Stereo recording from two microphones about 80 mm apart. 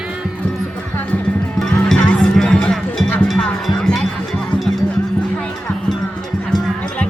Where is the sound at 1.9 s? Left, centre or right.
Centre.